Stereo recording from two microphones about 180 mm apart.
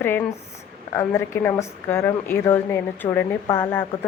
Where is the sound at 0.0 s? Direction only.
10° left (ahead or behind).